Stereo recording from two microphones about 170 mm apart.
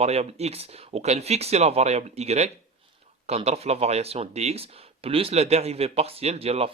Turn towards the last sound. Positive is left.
turn(degrees=-35)  # may be behind; listen again after turning